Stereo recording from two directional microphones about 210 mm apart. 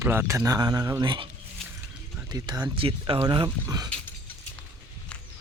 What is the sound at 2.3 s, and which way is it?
Speech, 20° right (ahead or behind).